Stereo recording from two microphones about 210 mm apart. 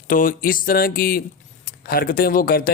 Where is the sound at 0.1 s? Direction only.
40° left (ahead or behind).